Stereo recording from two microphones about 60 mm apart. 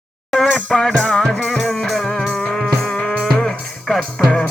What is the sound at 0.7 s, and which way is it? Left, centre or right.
Music, centre.